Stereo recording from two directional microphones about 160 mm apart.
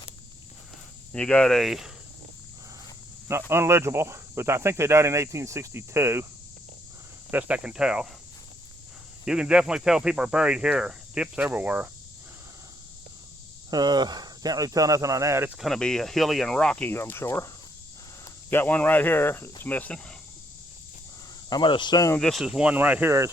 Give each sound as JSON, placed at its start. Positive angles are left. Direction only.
{"t": 1.1, "sound": "speech", "side_deg": 5}
{"t": 3.2, "sound": "speech", "side_deg": -15}
{"t": 7.3, "sound": "speech", "side_deg": -10}
{"t": 9.2, "sound": "speech", "side_deg": -5}
{"t": 13.7, "sound": "speech", "side_deg": -25}
{"t": 15.5, "sound": "speech", "side_deg": 0}
{"t": 18.5, "sound": "speech", "side_deg": 10}
{"t": 21.5, "sound": "speech", "side_deg": 30}
{"t": 22.1, "sound": "speech", "side_deg": 0}